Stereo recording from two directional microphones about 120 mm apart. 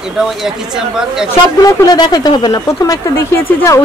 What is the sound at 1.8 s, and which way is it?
Speech, 35° left (ahead or behind).